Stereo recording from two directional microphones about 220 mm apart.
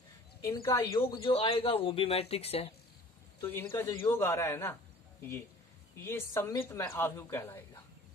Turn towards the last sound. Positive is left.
turn(degrees=10)  # may be behind; listen again after turning